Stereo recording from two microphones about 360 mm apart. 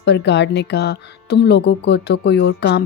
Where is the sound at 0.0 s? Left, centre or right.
Left.